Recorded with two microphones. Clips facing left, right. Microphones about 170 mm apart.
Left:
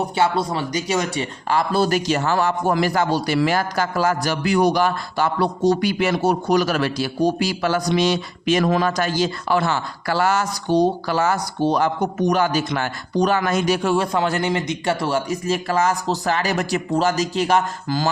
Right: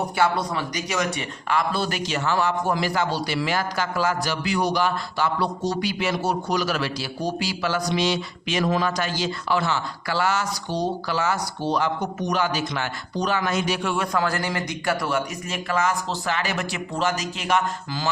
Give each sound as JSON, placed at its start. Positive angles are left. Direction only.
{"t": 0.2, "sound": "speech", "side_deg": 30}